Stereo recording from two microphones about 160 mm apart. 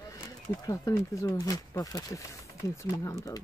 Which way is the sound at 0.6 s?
20° left (ahead or behind).